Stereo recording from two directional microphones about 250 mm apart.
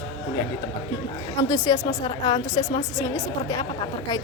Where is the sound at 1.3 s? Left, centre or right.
Centre.